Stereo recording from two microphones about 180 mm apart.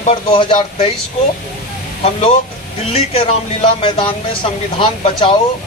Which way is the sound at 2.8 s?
30° left (ahead or behind).